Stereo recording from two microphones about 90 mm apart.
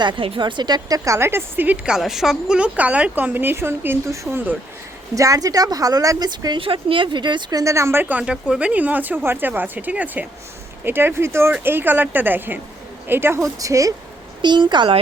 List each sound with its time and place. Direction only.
0.0 s a woman's voice: 70° right (ahead or behind); by 6.6 s 50° right (ahead or behind)
6.6 s speech: 90° right; by 7.6 s 60° right (ahead or behind)
7.6 s speech: 35° right (ahead or behind)
8.0 s a woman's voice: 15° right (ahead or behind)
13.4 s speech: 35° right (ahead or behind)
14.4 s speech: 55° right (ahead or behind)